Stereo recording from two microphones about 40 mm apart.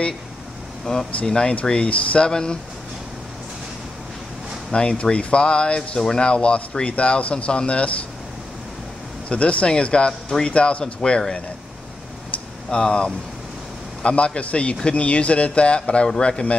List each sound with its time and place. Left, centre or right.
0.8 s speech: centre
1.5 s speech: left
4.7 s speech: left
9.3 s speech: left
12.7 s a man's voice: left